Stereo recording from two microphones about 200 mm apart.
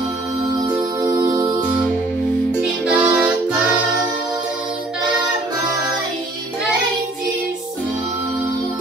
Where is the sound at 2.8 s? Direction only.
5° right (ahead or behind).